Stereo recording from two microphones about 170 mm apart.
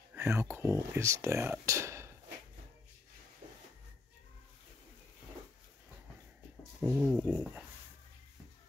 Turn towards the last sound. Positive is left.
turn(degrees=-5)  # may be behind; listen again after turning